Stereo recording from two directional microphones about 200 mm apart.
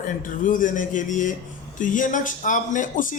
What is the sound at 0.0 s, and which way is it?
A man's voice, 40° left (ahead or behind).